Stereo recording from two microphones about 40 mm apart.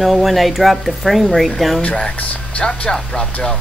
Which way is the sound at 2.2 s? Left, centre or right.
Left.